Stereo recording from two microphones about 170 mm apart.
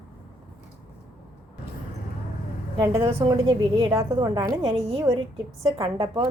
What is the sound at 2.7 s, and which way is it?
A woman's voice, 25° right (ahead or behind).